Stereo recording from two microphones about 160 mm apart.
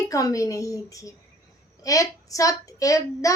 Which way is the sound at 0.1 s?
20° left (ahead or behind).